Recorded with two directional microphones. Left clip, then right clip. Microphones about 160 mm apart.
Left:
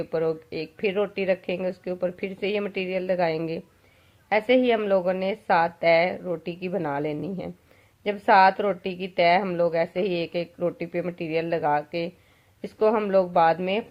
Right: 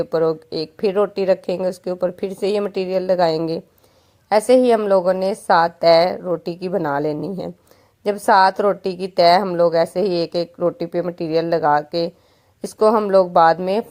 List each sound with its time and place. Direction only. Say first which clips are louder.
0.0 s a woman's voice: right 7 dB; 40° right (ahead or behind)